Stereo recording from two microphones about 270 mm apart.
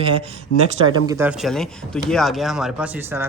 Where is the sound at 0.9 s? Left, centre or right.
Centre.